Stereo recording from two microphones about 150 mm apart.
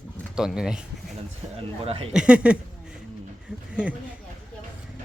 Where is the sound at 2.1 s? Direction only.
10° right (ahead or behind).